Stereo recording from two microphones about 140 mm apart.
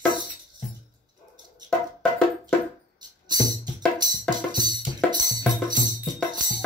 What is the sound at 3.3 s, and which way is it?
Music, 30° right (ahead or behind).